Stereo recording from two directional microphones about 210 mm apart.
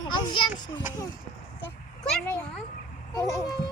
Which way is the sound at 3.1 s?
20° left (ahead or behind).